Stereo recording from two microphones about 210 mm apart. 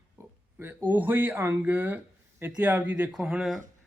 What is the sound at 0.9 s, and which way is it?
A man's voice, 10° right (ahead or behind).